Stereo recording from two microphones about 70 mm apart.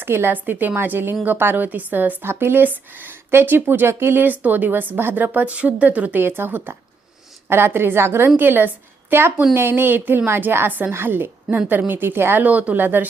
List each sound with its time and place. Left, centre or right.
0.0 s a woman's voice: right
11.5 s a woman's voice: centre
11.9 s speech: right